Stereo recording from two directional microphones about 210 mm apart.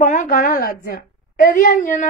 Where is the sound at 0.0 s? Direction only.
40° left (ahead or behind).